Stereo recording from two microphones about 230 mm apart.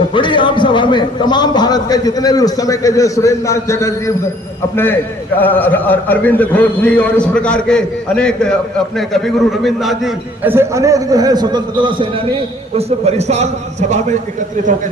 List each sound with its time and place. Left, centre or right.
0.1 s a man's voice: left
5.4 s a man's voice: centre; by 14.2 s right